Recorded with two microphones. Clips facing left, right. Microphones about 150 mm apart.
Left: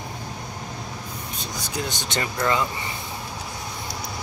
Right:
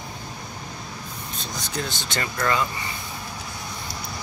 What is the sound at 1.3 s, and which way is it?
Speech, 10° left (ahead or behind).